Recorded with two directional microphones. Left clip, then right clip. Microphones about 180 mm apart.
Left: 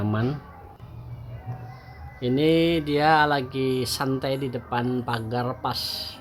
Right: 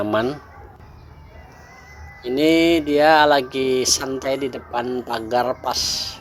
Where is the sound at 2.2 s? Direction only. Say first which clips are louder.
Right 4 dB; 30° right (ahead or behind).